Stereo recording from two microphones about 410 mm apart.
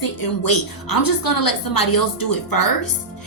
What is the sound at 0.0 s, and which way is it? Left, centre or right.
A woman's voice, left.